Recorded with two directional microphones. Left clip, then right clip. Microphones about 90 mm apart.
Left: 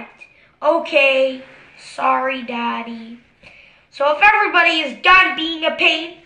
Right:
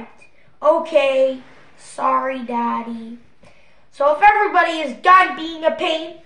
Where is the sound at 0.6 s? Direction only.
30° right (ahead or behind).